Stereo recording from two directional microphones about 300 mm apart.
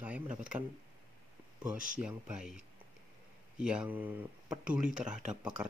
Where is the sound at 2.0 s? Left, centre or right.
Centre.